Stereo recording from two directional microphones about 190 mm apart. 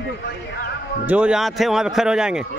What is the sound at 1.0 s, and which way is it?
A man's voice, 5° right (ahead or behind).